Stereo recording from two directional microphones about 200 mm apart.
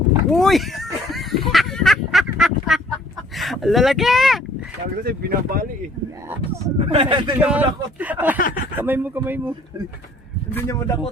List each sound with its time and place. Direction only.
0.3 s a sound: centre (ahead or behind)
3.3 s speech: centre (ahead or behind)
5.0 s speech: 50° right (ahead or behind)
6.7 s speech: 30° right (ahead or behind)
7.3 s speech: 5° right (ahead or behind)
8.4 s speech: 45° left (ahead or behind)
8.8 s speech: 10° right (ahead or behind)
10.5 s a man's voice: 15° left (ahead or behind)